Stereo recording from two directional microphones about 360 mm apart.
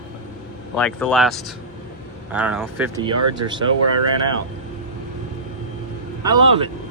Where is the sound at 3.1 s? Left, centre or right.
Right.